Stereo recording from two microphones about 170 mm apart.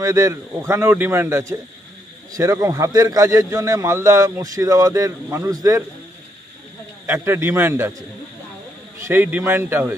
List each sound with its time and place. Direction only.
0.0 s a man's voice: 20° right (ahead or behind)
7.1 s a man's voice: 15° right (ahead or behind)
9.0 s a man's voice: 10° right (ahead or behind)